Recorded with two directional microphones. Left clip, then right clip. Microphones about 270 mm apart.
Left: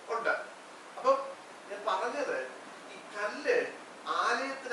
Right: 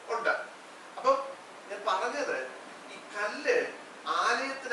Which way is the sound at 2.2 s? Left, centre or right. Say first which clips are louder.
Right 1 dB; centre.